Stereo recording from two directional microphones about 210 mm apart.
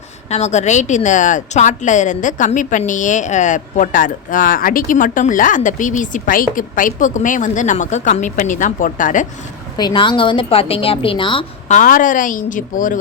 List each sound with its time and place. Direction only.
0.3 s speech: 30° left (ahead or behind)
9.7 s a woman's voice: 20° left (ahead or behind)
11.7 s speech: 40° left (ahead or behind)